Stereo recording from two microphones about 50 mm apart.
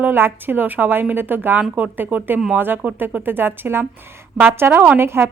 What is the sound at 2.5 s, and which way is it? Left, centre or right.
Speech, right.